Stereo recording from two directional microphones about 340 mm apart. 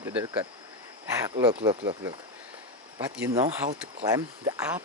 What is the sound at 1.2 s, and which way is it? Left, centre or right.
Speech, centre.